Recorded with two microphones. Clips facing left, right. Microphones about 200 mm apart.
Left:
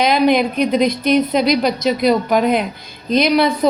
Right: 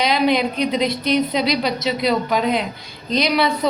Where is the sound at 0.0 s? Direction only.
50° left (ahead or behind).